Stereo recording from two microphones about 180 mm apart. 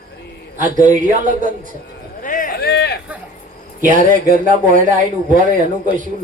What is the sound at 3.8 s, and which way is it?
Speech, 45° right (ahead or behind).